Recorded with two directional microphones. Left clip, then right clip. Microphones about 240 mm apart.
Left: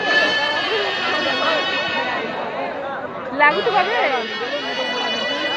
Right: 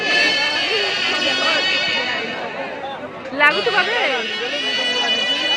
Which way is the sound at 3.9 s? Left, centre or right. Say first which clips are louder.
Even; centre.